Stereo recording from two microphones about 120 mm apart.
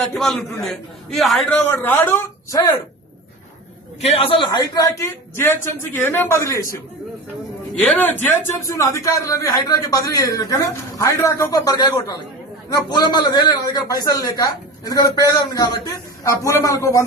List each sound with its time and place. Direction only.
0.0 s a man's voice: 5° left (ahead or behind)
1.8 s a man's voice: 15° left (ahead or behind)
4.0 s a man's voice: 50° left (ahead or behind); by 6.8 s 25° left (ahead or behind)
7.8 s a man's voice: 15° left (ahead or behind)